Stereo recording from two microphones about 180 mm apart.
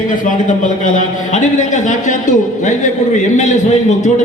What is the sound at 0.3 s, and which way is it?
A man's voice, 45° left (ahead or behind).